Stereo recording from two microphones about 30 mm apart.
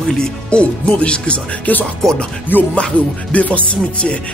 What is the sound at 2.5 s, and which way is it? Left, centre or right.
Speech, left.